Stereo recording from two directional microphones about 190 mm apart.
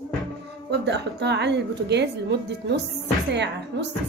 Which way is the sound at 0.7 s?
65° right (ahead or behind).